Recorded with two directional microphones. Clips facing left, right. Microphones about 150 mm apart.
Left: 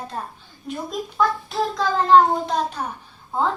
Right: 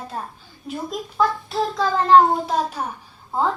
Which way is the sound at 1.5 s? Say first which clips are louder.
Right 1 dB; centre (ahead or behind).